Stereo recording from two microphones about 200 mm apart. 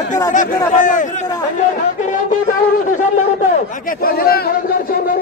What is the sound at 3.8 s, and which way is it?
Speech, 45° left (ahead or behind).